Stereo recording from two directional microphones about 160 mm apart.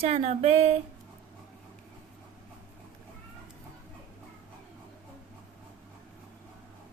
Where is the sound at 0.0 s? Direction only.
40° right (ahead or behind).